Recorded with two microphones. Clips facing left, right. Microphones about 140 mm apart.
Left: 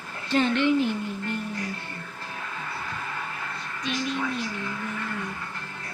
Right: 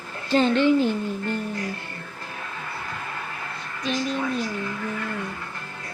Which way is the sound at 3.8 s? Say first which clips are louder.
Right 3 dB; 40° right (ahead or behind).